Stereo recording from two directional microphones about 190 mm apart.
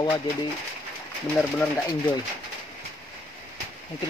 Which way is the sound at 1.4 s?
10° left (ahead or behind).